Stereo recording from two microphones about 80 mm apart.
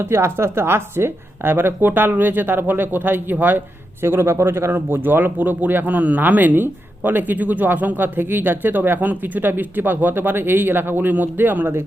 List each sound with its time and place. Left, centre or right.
0.0 s speech: right